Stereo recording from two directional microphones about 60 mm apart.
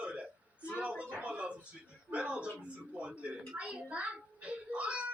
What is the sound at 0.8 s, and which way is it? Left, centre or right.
A woman's voice, right.